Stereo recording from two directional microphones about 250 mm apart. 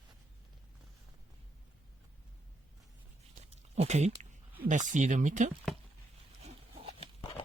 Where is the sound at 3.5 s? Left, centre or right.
Right.